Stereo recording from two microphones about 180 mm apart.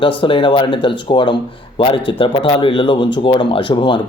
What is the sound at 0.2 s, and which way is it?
Speech, 30° left (ahead or behind).